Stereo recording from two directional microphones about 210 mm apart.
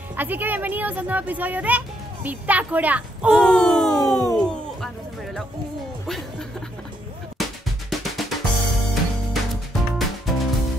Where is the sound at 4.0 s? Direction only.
15° left (ahead or behind).